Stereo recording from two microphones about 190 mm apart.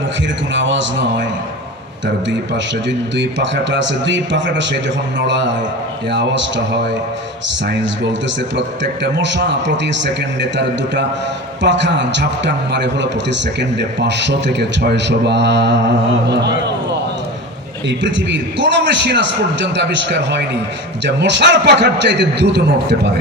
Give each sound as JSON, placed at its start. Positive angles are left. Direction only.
{"t": 0.5, "sound": "a man's voice", "side_deg": -70}
{"t": 8.4, "sound": "a man's voice", "side_deg": -70}